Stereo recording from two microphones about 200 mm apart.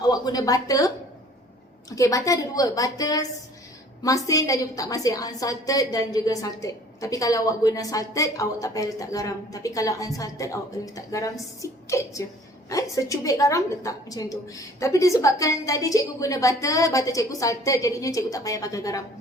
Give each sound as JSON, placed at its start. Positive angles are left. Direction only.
{"t": 0.0, "sound": "speech", "side_deg": 20}
{"t": 2.0, "sound": "a woman's voice", "side_deg": 15}